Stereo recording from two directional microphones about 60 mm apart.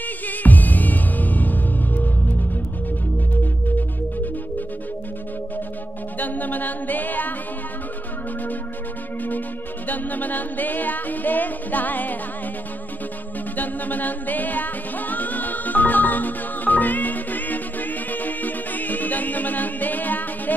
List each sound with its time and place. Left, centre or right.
0.3 s music: left
6.1 s a capella: left
9.8 s music: left
13.6 s music: left